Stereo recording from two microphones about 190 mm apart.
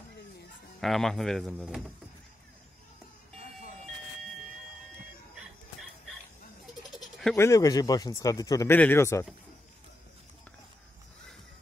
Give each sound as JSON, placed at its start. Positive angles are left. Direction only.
{"t": 0.7, "sound": "speech", "side_deg": 0}
{"t": 5.3, "sound": "a sound", "side_deg": 0}
{"t": 7.3, "sound": "speech", "side_deg": 15}